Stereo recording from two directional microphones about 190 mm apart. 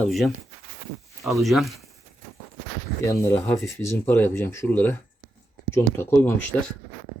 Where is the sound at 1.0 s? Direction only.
Centre (ahead or behind).